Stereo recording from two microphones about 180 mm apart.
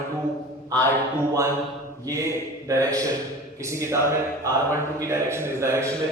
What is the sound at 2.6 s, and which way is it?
A man's voice, 20° right (ahead or behind).